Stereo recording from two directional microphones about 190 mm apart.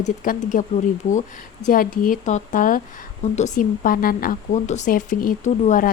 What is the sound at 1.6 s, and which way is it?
Speech, 45° left (ahead or behind).